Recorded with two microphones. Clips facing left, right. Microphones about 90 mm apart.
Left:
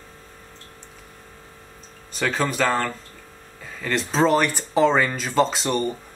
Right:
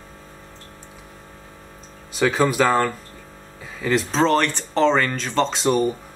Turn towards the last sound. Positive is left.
turn(degrees=0)  # may be behind; listen again after turning